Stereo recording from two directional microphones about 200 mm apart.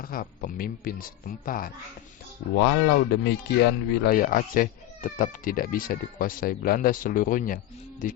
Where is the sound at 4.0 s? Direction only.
45° left (ahead or behind).